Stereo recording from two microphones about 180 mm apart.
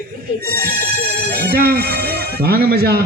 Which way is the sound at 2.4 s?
60° right (ahead or behind).